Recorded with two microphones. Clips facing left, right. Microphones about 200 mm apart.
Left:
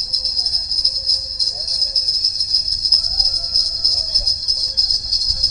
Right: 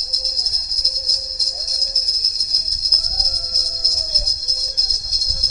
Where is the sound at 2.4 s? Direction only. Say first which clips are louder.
Even; 10° left (ahead or behind).